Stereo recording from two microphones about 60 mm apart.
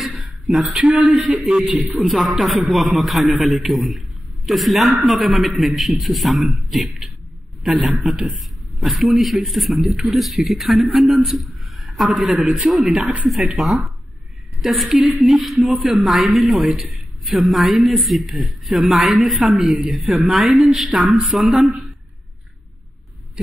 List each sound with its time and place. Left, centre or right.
0.0 s a sound: centre
0.7 s a man's voice: right
2.0 s a man's voice: centre